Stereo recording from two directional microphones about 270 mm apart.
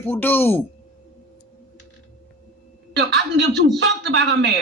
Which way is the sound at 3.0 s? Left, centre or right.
Right.